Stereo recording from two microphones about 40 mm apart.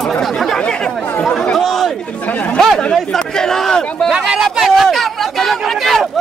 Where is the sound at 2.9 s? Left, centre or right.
Centre.